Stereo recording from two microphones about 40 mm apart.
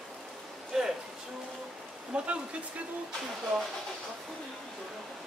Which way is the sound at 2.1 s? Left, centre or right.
Right.